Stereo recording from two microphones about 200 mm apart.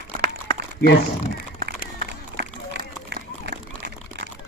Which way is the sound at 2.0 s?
50° right (ahead or behind).